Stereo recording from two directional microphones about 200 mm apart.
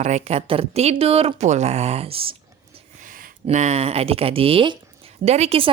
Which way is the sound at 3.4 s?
35° right (ahead or behind).